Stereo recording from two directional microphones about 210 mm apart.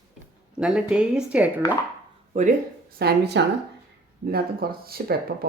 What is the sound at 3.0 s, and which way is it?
Speech, 50° right (ahead or behind).